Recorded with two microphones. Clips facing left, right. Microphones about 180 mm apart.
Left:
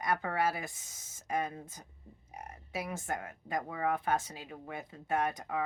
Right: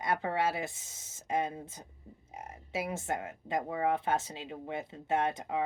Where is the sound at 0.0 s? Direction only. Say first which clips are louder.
Right 1 dB; 25° right (ahead or behind).